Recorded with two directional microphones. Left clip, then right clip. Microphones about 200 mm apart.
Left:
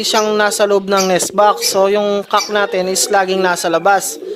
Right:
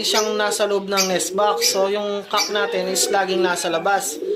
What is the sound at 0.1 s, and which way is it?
Speech, 45° left (ahead or behind).